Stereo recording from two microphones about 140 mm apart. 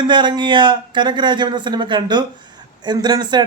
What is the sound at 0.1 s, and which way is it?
A man's voice, 35° right (ahead or behind).